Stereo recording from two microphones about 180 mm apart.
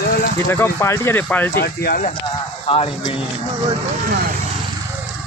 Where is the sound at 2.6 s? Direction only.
30° left (ahead or behind).